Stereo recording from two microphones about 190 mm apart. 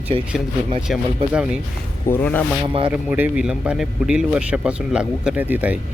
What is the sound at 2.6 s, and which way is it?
Speech, 30° right (ahead or behind).